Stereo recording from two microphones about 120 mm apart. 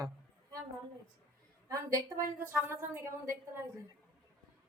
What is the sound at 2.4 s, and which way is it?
Speech, 20° right (ahead or behind).